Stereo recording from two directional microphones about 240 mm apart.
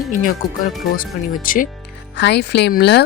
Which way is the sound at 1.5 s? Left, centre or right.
Left.